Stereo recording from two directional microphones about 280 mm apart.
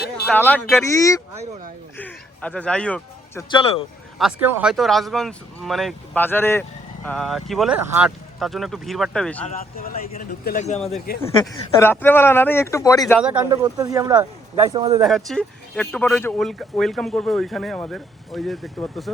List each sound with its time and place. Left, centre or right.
0.3 s speech: centre
2.0 s music: centre
3.5 s speech: centre
4.2 s speech: centre
9.4 s a man's voice: left
11.2 s speech: centre
13.4 s speech: centre
15.0 s speech: centre